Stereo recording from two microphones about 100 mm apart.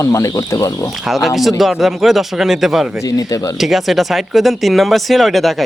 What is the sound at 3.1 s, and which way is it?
Speech, 40° left (ahead or behind).